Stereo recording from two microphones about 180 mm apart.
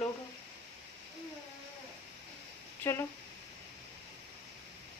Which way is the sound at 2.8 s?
15° left (ahead or behind).